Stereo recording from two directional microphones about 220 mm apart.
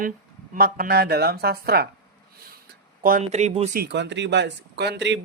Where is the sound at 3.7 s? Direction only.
50° right (ahead or behind).